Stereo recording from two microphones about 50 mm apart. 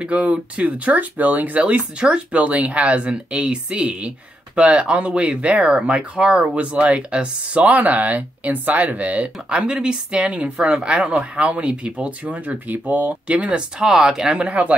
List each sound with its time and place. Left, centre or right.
0.0 s speech: right
13.3 s speech: right